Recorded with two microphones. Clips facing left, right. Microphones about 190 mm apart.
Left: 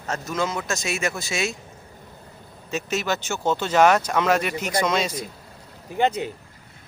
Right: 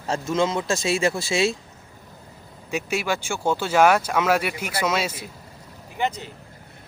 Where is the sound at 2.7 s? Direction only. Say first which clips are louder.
Even; 10° right (ahead or behind).